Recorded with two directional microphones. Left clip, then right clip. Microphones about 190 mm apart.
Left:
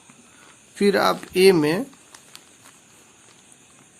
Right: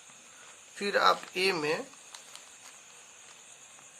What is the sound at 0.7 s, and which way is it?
Speech, 40° left (ahead or behind).